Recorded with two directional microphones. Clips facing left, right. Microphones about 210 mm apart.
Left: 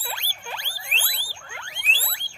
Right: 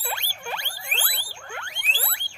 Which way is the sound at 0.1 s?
60° right (ahead or behind).